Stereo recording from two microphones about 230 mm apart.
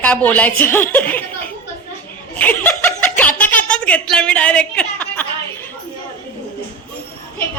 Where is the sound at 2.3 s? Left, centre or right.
Centre.